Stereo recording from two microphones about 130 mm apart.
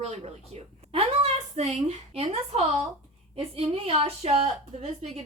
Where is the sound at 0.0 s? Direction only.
55° right (ahead or behind).